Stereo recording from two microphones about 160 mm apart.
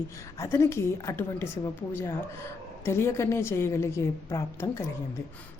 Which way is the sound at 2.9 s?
15° left (ahead or behind).